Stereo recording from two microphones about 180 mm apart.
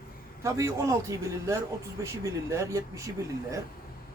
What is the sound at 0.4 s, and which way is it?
Speech, 15° right (ahead or behind).